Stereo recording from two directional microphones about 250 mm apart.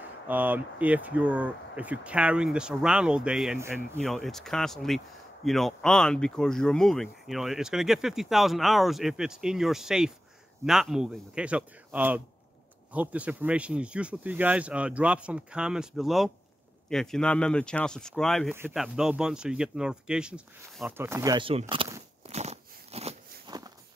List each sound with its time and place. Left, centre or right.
0.3 s speech: centre
4.0 s speech: centre
22.2 s biting: right